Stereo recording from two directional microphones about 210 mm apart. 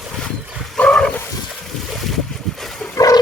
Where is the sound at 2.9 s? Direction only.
15° left (ahead or behind).